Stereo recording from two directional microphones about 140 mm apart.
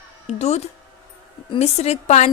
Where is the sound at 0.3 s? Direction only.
50° left (ahead or behind).